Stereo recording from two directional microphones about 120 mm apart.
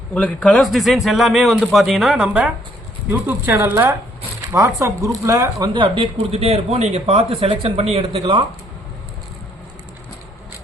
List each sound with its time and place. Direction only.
0.1 s speech: 10° left (ahead or behind); by 2.5 s 5° right (ahead or behind)
3.1 s speech: 20° right (ahead or behind); by 8.4 s 45° right (ahead or behind)